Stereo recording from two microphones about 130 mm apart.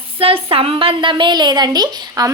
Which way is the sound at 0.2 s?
45° right (ahead or behind).